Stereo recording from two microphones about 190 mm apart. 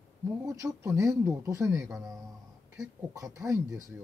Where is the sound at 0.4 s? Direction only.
15° right (ahead or behind).